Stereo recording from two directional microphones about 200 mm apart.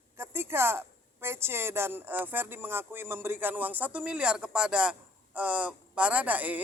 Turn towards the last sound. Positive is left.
turn(degrees=-10)  # may be behind; listen again after turning